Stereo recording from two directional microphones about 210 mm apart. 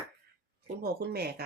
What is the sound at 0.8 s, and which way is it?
Speech, 50° right (ahead or behind).